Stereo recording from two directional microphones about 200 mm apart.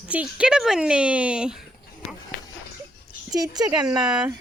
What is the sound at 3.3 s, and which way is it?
Speech, 20° right (ahead or behind).